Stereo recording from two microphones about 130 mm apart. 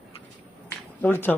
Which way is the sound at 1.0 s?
15° left (ahead or behind).